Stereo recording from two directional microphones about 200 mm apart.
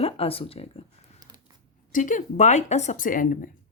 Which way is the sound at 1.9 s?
40° left (ahead or behind).